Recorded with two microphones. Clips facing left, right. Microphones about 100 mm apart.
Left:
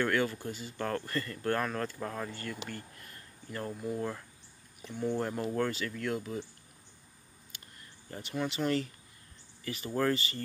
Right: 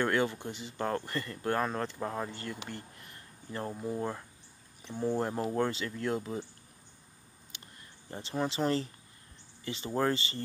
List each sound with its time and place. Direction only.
0.0 s speech: 25° right (ahead or behind)
8.1 s speech: 30° right (ahead or behind)